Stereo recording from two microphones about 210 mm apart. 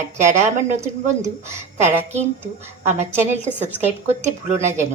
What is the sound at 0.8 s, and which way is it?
Speech, 15° right (ahead or behind).